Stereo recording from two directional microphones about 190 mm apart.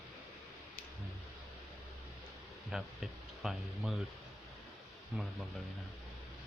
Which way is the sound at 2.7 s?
Centre (ahead or behind).